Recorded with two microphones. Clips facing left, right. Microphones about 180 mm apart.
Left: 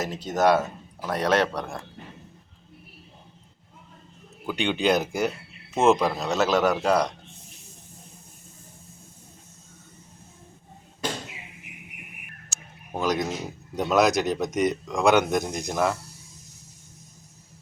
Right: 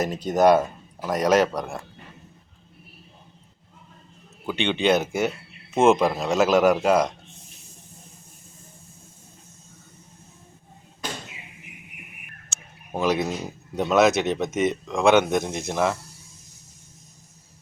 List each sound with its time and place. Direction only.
0.0 s speech: 15° right (ahead or behind)
4.4 s speech: centre (ahead or behind)
12.5 s a sound: centre (ahead or behind)
12.9 s speech: 5° right (ahead or behind)